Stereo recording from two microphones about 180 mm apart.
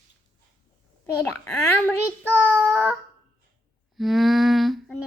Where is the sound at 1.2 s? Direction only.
15° left (ahead or behind).